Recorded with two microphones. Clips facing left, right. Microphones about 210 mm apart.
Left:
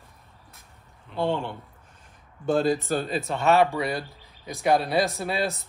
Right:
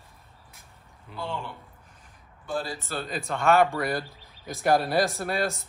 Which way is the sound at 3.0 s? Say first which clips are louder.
Left 3 dB; 25° left (ahead or behind).